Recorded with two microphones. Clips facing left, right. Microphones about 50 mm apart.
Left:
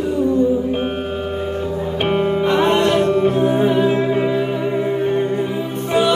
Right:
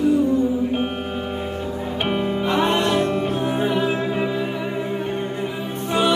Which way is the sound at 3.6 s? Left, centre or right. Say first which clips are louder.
Left 3 dB; left.